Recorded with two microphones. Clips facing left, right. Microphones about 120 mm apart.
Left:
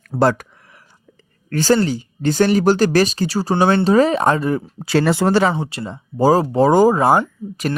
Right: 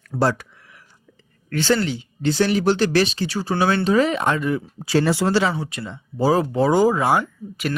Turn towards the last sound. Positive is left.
turn(degrees=40)  # may be behind; listen again after turning